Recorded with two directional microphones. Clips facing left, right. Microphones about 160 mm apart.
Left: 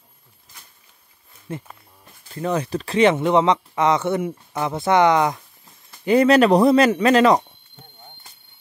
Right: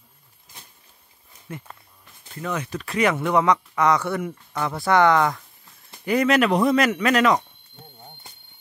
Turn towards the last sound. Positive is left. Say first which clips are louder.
# left 4 dB
turn(degrees=35)  # may be behind; listen again after turning